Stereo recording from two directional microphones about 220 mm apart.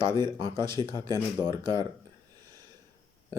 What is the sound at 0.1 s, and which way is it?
Speech, 10° left (ahead or behind).